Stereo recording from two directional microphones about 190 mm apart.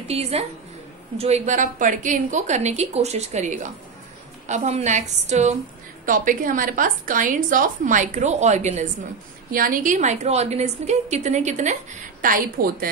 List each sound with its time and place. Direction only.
0.1 s a woman's voice: 30° right (ahead or behind); by 12.9 s 50° right (ahead or behind)